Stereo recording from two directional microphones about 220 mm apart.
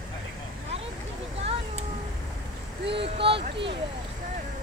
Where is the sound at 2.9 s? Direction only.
25° right (ahead or behind).